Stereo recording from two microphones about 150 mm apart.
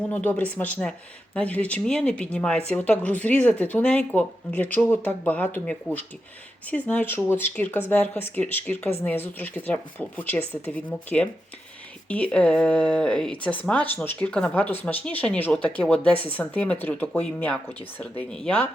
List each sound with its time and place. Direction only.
0.1 s speech: 10° left (ahead or behind)